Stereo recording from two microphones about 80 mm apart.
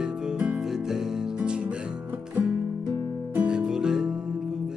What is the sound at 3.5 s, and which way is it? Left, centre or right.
Music, centre.